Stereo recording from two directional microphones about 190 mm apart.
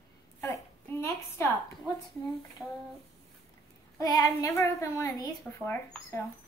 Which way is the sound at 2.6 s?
Centre (ahead or behind).